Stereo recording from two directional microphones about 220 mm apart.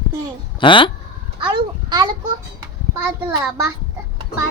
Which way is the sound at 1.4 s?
20° right (ahead or behind).